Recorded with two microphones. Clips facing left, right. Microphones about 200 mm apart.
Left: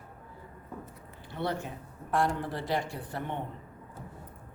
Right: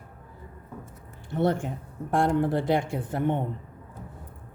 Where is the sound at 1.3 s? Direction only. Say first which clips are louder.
Right 8 dB; 50° right (ahead or behind).